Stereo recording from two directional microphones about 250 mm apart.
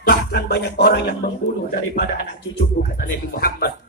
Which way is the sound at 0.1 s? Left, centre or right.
Left.